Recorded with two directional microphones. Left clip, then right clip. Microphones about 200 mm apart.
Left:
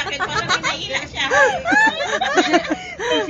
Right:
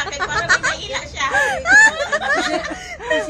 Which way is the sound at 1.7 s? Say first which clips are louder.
Right 6 dB; 25° right (ahead or behind).